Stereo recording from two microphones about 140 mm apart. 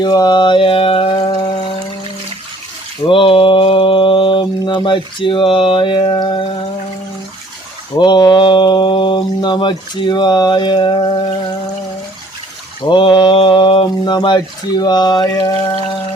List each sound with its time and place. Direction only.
0.0 s music: 30° left (ahead or behind)
3.1 s mantra: 40° left (ahead or behind)
7.9 s speech: 30° left (ahead or behind)
12.8 s speech: 35° left (ahead or behind)